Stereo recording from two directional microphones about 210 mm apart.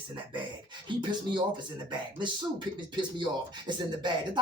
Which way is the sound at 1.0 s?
20° right (ahead or behind).